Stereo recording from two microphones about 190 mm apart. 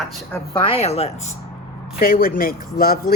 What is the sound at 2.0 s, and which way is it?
Speech, 50° left (ahead or behind).